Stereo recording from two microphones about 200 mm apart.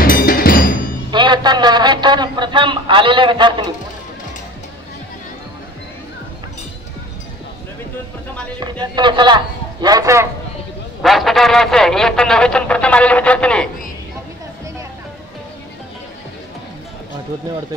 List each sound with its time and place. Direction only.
0.0 s music: 45° left (ahead or behind)
1.1 s a man's voice: 20° right (ahead or behind)
8.5 s a man's voice: 20° right (ahead or behind)
11.0 s speech: centre (ahead or behind)